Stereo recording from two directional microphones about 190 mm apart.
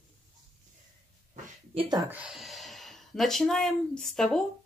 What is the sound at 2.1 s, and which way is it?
A woman's voice, 5° right (ahead or behind).